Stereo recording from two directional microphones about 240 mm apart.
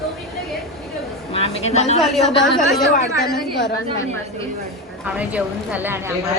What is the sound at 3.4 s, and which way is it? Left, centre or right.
Speech, left.